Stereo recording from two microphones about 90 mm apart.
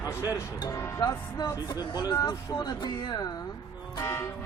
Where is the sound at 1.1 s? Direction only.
45° left (ahead or behind).